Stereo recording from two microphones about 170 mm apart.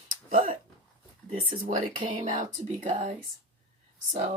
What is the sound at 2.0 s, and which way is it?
Speech, 50° right (ahead or behind).